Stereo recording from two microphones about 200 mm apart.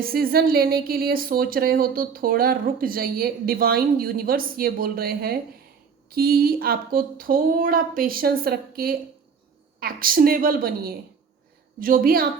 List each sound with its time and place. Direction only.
0.0 s a woman's voice: 50° right (ahead or behind)